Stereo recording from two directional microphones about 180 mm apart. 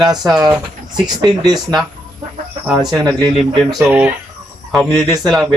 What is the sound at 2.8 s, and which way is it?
Speech, 20° right (ahead or behind).